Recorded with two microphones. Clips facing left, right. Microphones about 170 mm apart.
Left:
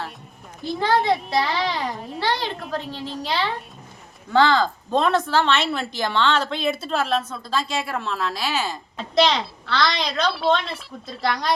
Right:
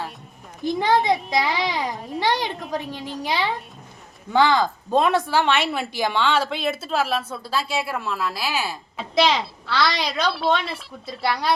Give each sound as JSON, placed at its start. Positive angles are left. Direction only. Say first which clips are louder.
{"t": 0.6, "sound": "a woman's voice", "louder": "right 1 dB", "side_deg": -15}